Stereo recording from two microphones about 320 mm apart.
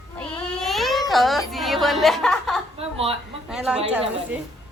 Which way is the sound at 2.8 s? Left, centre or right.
Centre.